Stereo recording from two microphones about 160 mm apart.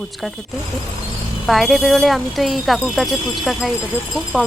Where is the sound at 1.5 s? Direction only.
Centre (ahead or behind).